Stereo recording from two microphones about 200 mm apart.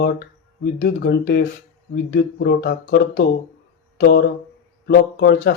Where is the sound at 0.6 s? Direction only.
55° left (ahead or behind).